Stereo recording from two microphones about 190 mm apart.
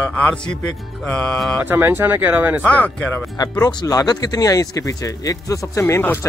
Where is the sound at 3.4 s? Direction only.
20° left (ahead or behind).